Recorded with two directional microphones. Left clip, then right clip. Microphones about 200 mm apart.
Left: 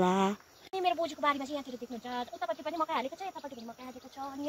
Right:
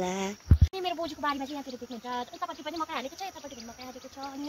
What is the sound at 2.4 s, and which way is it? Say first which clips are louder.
Speech: left 1 dB; 50° left (ahead or behind).